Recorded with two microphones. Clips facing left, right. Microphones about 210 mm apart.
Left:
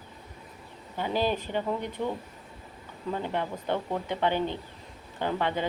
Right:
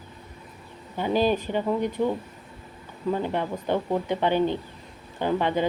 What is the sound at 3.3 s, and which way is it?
Speech, 15° right (ahead or behind).